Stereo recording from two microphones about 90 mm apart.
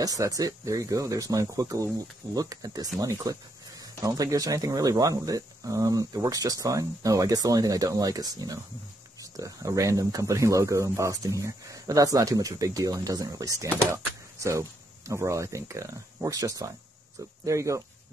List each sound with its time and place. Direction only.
0.0 s speech: 40° right (ahead or behind)